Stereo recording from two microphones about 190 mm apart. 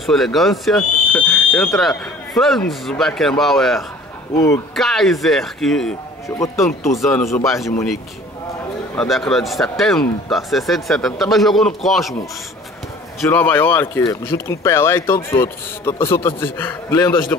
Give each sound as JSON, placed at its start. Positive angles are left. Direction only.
{"t": 0.0, "sound": "speech", "side_deg": 0}
{"t": 6.2, "sound": "speech", "side_deg": 15}
{"t": 7.0, "sound": "speech", "side_deg": 0}
{"t": 8.9, "sound": "a man's voice", "side_deg": 0}
{"t": 13.3, "sound": "speech", "side_deg": 10}